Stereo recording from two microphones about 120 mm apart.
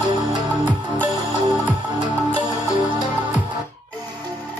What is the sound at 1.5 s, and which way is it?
Music, 40° right (ahead or behind).